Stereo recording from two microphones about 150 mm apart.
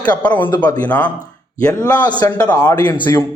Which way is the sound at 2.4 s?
15° left (ahead or behind).